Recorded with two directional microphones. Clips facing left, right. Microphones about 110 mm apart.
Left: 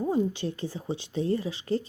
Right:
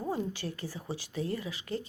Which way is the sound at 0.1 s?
20° left (ahead or behind).